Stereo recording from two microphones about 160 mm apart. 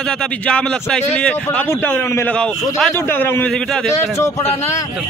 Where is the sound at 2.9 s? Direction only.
15° left (ahead or behind).